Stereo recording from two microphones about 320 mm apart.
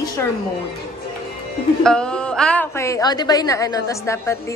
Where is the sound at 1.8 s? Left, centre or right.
Centre.